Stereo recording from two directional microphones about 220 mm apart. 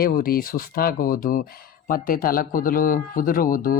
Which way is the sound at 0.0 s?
40° left (ahead or behind).